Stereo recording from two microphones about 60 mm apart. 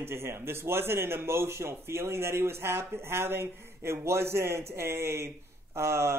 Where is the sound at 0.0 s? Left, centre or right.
Right.